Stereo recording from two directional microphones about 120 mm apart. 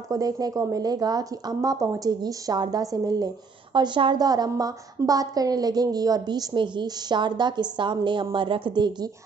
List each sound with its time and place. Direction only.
0.1 s a woman's voice: 30° right (ahead or behind)